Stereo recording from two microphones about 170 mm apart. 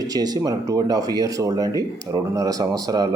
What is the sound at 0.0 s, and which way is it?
Speech, 20° right (ahead or behind).